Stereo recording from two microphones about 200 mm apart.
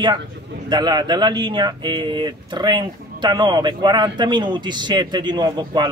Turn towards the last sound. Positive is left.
turn(degrees=-20)  # may be behind; listen again after turning